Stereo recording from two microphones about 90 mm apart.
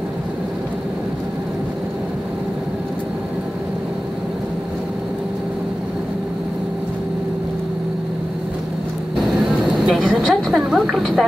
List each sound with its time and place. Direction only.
9.6 s vehicle: centre (ahead or behind)